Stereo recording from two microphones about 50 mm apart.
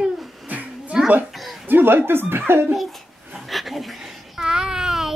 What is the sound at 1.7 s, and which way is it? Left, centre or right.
Speech, right.